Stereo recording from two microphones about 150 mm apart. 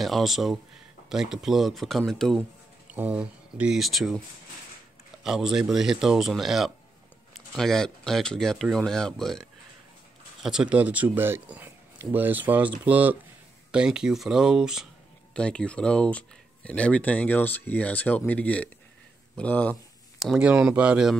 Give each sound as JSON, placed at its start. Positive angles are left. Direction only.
{"t": 0.0, "sound": "speech", "side_deg": 0}
{"t": 2.9, "sound": "speech", "side_deg": -10}
{"t": 5.2, "sound": "speech", "side_deg": 0}
{"t": 15.3, "sound": "speech", "side_deg": 5}